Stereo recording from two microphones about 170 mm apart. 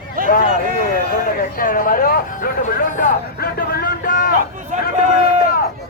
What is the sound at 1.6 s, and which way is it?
Speech, 55° left (ahead or behind).